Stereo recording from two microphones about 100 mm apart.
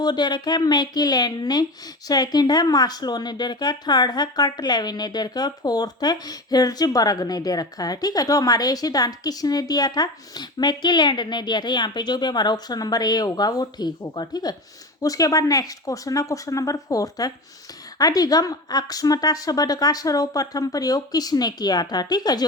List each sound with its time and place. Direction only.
0.0 s speech: 45° left (ahead or behind)